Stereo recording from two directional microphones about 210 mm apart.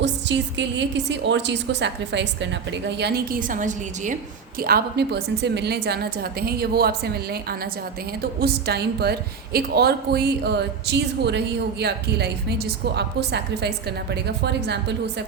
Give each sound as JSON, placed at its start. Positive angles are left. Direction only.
{"t": 0.0, "sound": "a woman's voice", "side_deg": -55}
{"t": 4.6, "sound": "a woman's voice", "side_deg": -50}